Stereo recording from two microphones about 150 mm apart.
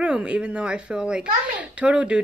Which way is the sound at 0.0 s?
10° right (ahead or behind).